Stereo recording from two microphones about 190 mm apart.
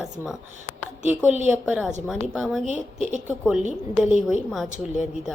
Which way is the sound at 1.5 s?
5° right (ahead or behind).